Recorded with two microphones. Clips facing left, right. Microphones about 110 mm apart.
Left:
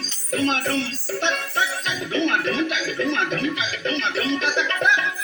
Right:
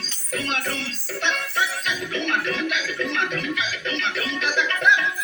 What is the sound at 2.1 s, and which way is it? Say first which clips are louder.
Music: left 5 dB; 30° left (ahead or behind).